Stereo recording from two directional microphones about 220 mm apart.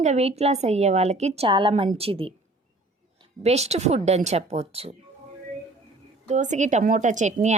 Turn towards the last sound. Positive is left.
turn(degrees=-35)  # may be behind; listen again after turning